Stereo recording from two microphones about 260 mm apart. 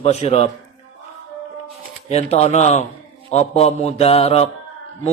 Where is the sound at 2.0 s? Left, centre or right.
Left.